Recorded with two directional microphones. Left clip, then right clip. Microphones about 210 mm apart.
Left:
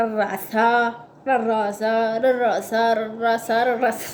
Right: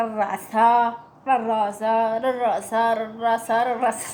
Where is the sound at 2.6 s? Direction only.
5° right (ahead or behind).